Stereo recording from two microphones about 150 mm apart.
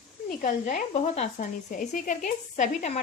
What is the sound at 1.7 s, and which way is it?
A woman's voice, 60° left (ahead or behind).